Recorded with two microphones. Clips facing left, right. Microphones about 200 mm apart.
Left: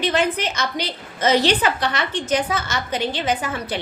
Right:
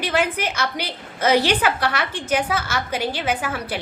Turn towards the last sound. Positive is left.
turn(degrees=-10)  # may be behind; listen again after turning